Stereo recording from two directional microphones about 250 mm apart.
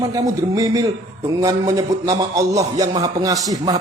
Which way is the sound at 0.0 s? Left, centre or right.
Centre.